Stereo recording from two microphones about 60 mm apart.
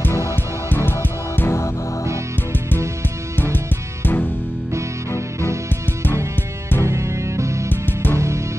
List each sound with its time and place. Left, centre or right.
0.4 s music: left
3.5 s music: left
4.7 s music: right
6.8 s music: right
7.7 s music: left